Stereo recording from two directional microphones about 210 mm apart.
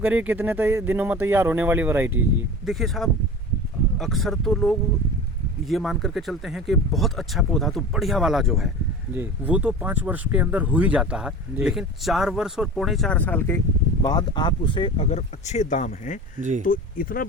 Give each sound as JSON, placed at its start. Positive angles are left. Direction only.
{"t": 0.0, "sound": "speech", "side_deg": -10}
{"t": 2.6, "sound": "speech", "side_deg": 0}
{"t": 14.0, "sound": "speech", "side_deg": 20}
{"t": 16.4, "sound": "speech", "side_deg": -35}
{"t": 16.6, "sound": "speech", "side_deg": 40}